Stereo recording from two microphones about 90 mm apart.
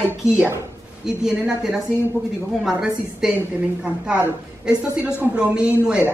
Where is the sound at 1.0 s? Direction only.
5° right (ahead or behind).